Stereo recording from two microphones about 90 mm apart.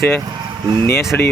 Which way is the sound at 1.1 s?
25° left (ahead or behind).